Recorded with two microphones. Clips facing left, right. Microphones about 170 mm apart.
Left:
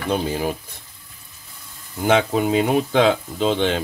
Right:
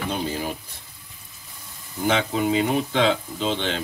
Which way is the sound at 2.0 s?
55° left (ahead or behind).